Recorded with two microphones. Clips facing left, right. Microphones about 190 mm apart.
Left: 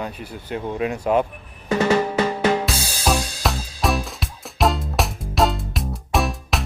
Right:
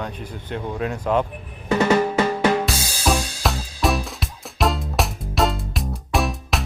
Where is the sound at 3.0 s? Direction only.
Centre (ahead or behind).